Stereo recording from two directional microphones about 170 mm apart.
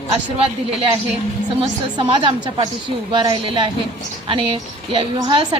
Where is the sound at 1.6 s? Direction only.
30° right (ahead or behind).